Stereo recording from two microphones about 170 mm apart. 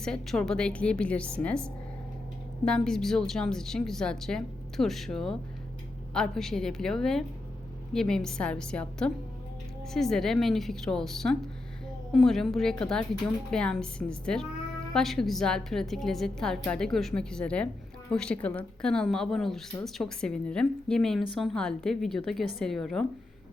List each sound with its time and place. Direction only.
0.0 s speech: 5° left (ahead or behind)